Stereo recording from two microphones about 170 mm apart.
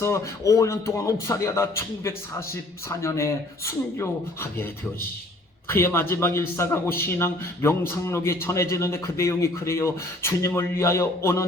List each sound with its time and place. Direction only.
0.0 s a man's voice: 20° left (ahead or behind)
3.0 s a man's voice: 15° left (ahead or behind)
5.6 s a man's voice: 15° left (ahead or behind)